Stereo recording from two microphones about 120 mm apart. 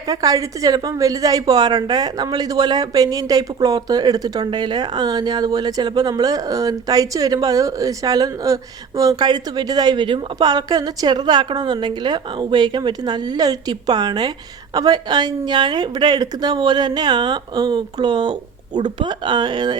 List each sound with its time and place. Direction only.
0.1 s a woman's voice: 30° right (ahead or behind)